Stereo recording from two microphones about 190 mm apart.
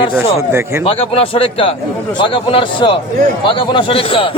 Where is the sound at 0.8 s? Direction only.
30° left (ahead or behind).